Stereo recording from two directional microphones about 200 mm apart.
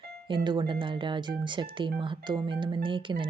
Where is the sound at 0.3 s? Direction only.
25° right (ahead or behind).